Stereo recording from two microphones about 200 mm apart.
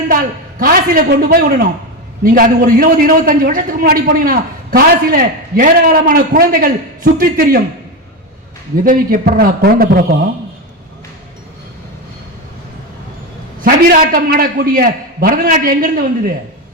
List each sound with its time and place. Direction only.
0.6 s a man's voice: 45° right (ahead or behind)
8.7 s a man's voice: 45° right (ahead or behind)
13.7 s a man's voice: 45° right (ahead or behind)